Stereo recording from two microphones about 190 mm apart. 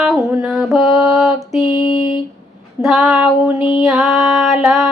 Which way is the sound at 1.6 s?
25° left (ahead or behind).